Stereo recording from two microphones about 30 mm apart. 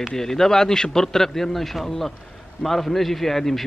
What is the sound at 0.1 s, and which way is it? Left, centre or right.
A man's voice, centre.